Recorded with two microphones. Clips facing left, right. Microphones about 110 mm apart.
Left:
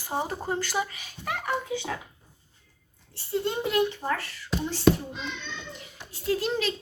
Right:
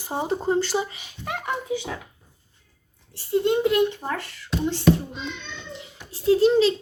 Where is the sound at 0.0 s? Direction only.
20° right (ahead or behind).